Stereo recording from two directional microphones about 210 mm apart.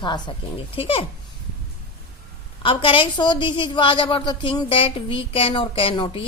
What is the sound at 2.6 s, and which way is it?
A woman's voice, 25° left (ahead or behind).